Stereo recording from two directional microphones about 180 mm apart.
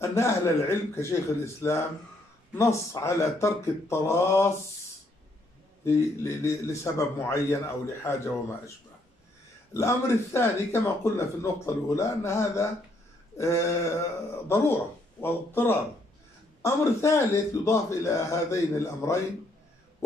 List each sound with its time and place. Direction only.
0.1 s speech: 15° left (ahead or behind)
5.9 s speech: 15° left (ahead or behind)
9.8 s speech: 15° left (ahead or behind)